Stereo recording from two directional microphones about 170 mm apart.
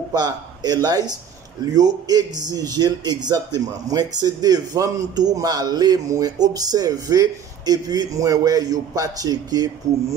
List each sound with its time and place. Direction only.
0.1 s a man's voice: 25° right (ahead or behind)